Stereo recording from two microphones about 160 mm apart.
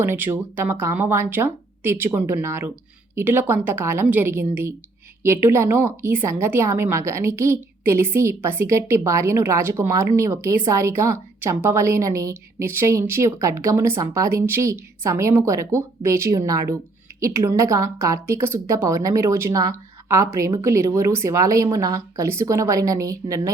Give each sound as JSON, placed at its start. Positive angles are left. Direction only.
{"t": 0.0, "sound": "a woman's voice", "side_deg": -15}